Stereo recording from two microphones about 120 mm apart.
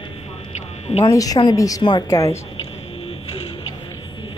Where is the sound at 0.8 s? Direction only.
60° left (ahead or behind).